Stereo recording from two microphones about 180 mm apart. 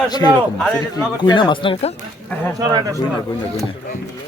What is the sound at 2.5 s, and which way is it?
Speech, 20° right (ahead or behind).